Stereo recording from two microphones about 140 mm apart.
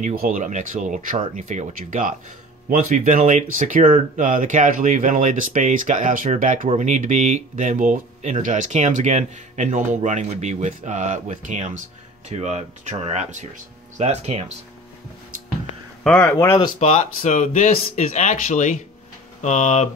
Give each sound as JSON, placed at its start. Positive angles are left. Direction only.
{"t": 0.0, "sound": "speech", "side_deg": -80}
{"t": 2.7, "sound": "speech", "side_deg": -60}
{"t": 16.0, "sound": "speech", "side_deg": 10}
{"t": 16.3, "sound": "speech", "side_deg": 20}
{"t": 16.8, "sound": "speech", "side_deg": 60}